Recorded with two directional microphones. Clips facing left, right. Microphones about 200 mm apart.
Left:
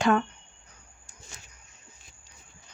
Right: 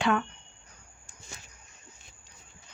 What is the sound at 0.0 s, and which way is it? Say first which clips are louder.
Speech: left 3 dB; 40° left (ahead or behind).